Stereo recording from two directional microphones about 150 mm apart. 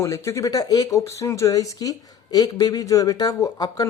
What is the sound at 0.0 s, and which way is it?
Speech, 20° left (ahead or behind).